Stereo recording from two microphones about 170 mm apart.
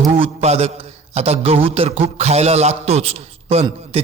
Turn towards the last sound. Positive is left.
turn(degrees=-35)  # may be behind; listen again after turning